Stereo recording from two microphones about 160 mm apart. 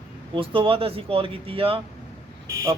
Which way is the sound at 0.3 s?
35° right (ahead or behind).